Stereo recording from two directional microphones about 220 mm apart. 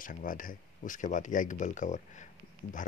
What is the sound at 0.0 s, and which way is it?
Speech, 40° left (ahead or behind).